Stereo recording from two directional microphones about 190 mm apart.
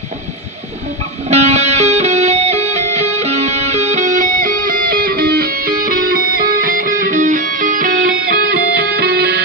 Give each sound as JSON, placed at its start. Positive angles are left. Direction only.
{"t": 1.3, "sound": "music", "side_deg": -35}